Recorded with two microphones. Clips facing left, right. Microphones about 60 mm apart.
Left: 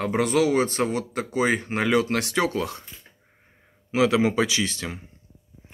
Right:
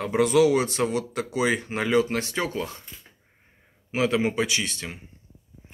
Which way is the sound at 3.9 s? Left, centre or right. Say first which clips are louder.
Left 3 dB; left.